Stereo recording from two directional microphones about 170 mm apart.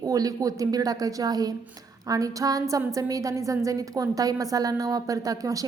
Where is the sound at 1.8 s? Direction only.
20° right (ahead or behind).